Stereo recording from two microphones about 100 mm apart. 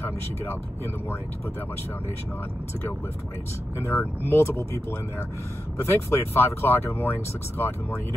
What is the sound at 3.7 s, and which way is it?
Speech, 25° left (ahead or behind).